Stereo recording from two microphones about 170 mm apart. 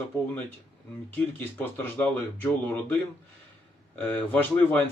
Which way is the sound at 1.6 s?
10° left (ahead or behind).